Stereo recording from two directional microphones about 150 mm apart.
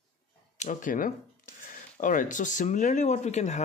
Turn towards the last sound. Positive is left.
turn(degrees=50)  # may be behind; listen again after turning